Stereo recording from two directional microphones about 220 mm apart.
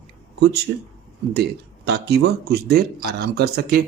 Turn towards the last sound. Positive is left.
turn(degrees=-45)  # may be behind; listen again after turning